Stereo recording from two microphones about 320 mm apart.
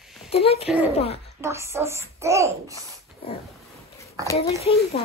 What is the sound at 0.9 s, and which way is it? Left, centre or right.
Speech, centre.